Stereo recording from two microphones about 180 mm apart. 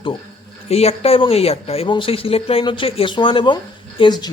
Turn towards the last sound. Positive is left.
turn(degrees=30)  # may be behind; listen again after turning